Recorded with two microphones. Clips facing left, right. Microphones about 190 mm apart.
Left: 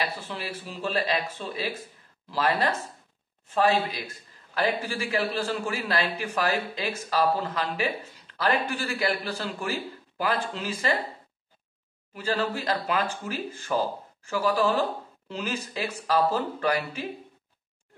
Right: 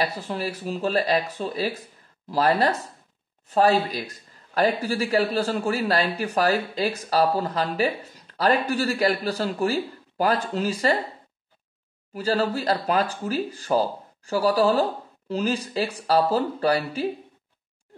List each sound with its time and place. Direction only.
0.0 s speech: 40° right (ahead or behind)
12.1 s speech: 40° right (ahead or behind)